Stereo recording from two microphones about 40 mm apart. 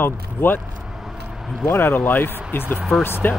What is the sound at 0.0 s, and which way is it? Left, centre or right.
Speech, left.